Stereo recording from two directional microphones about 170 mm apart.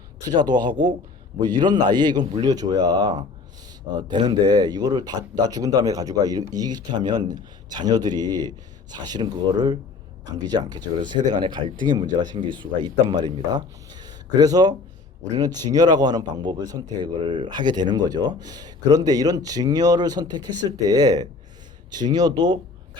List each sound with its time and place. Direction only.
0.3 s speech: 25° right (ahead or behind)